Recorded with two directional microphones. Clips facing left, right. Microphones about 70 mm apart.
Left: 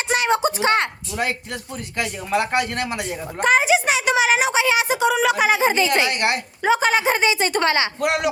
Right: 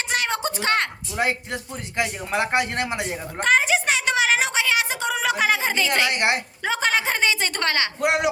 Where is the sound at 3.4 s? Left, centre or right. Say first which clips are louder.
Left 3 dB; centre.